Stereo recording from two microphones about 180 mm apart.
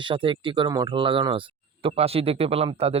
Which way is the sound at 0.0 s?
30° right (ahead or behind).